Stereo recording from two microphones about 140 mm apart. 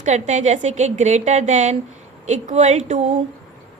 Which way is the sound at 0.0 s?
60° right (ahead or behind).